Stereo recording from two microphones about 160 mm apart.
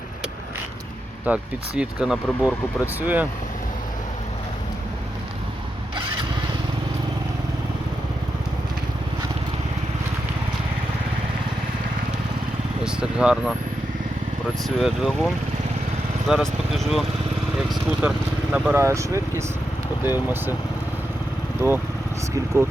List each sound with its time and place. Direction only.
1.2 s speech: 5° right (ahead or behind)
12.8 s vehicle: 5° right (ahead or behind)
14.8 s speech: centre (ahead or behind)
16.3 s speech: centre (ahead or behind)
18.0 s speech: 10° right (ahead or behind)
21.6 s speech: 15° right (ahead or behind)